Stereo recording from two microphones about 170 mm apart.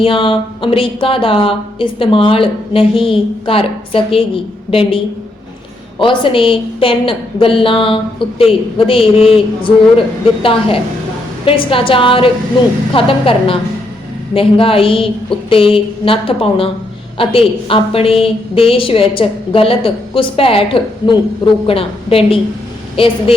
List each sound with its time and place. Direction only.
0.0 s a woman's voice: 30° left (ahead or behind)
6.0 s a woman's voice: 30° left (ahead or behind)